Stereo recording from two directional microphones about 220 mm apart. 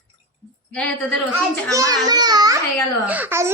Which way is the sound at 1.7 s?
15° right (ahead or behind).